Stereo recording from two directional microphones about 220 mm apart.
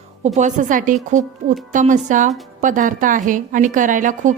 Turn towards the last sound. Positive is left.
turn(degrees=-35)  # may be behind; listen again after turning